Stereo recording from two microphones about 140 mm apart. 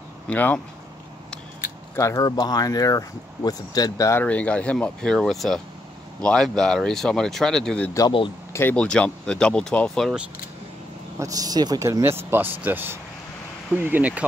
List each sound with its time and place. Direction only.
0.3 s speech: 10° left (ahead or behind)
2.0 s speech: 25° left (ahead or behind)
4.2 s speech: 10° left (ahead or behind)
11.1 s speech: 25° right (ahead or behind)